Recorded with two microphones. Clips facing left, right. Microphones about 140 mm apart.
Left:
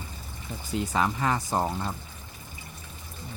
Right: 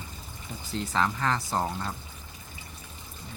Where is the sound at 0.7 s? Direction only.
15° left (ahead or behind).